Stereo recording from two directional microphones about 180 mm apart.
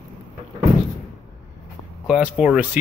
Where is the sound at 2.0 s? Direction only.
5° right (ahead or behind).